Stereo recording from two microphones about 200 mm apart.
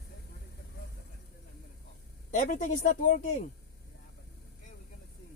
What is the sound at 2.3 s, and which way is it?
Speech, 40° left (ahead or behind).